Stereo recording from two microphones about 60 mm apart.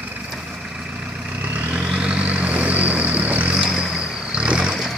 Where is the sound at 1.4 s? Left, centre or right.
Right; by 4.9 s centre.